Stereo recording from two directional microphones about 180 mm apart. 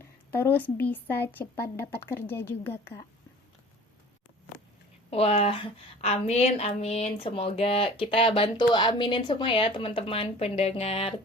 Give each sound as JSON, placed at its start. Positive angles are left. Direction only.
{"t": 0.3, "sound": "a woman's voice", "side_deg": 10}
{"t": 5.1, "sound": "a woman's voice", "side_deg": 35}